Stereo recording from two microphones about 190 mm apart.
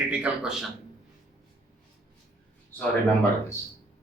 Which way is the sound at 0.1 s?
5° right (ahead or behind).